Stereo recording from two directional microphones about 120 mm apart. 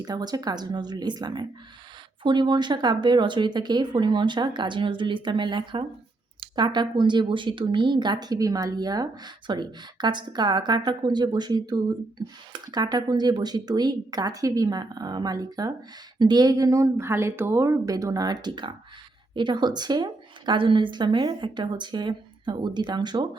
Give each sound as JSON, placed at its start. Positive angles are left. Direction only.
{"t": 0.0, "sound": "a woman's voice", "side_deg": -35}